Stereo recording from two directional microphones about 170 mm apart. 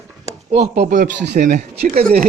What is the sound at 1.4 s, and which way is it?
Speech, 45° right (ahead or behind).